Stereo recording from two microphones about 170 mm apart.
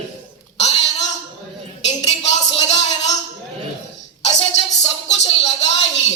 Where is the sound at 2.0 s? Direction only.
40° left (ahead or behind).